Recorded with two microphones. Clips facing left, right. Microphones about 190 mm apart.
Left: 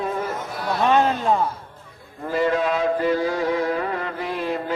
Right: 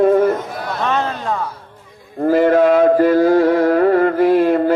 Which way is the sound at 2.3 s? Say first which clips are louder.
Right 9 dB; 55° right (ahead or behind).